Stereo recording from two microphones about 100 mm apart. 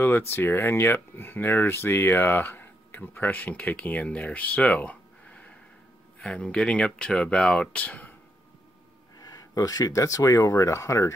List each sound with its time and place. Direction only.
0.3 s speech: 20° left (ahead or behind)
9.2 s speech: 40° left (ahead or behind)